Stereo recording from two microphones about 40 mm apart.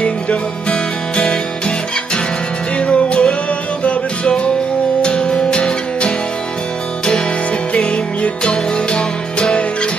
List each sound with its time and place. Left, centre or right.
0.0 s music: left
2.9 s music: left
7.7 s music: left